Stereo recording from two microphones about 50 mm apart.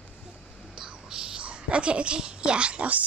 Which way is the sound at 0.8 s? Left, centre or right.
Centre.